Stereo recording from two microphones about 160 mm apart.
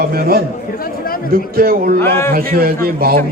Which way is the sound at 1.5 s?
65° right (ahead or behind).